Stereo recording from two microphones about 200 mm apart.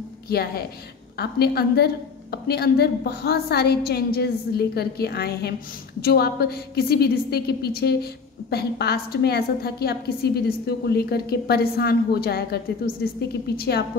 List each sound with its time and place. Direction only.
0.3 s a woman's voice: 50° left (ahead or behind)